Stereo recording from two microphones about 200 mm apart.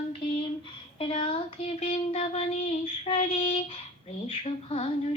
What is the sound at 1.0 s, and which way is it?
Child singing, 25° left (ahead or behind).